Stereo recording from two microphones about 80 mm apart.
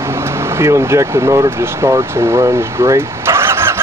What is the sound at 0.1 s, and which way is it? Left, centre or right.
Speech, right.